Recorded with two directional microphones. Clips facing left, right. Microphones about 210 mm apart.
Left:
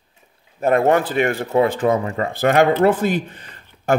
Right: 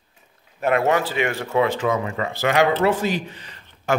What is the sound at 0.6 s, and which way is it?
A man's voice, 50° left (ahead or behind).